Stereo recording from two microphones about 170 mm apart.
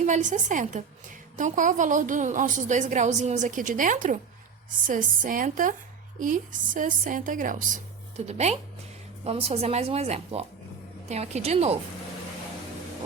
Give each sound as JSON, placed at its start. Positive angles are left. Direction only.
{"t": 0.0, "sound": "a woman's voice", "side_deg": -45}